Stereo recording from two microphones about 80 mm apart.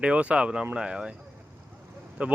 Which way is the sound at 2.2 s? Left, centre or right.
Centre.